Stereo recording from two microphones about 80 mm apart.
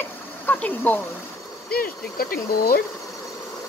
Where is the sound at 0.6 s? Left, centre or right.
Left.